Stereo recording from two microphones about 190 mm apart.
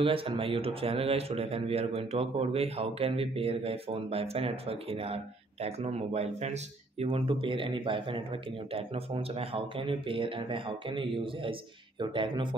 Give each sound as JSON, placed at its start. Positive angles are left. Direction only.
{"t": 0.0, "sound": "speech", "side_deg": -30}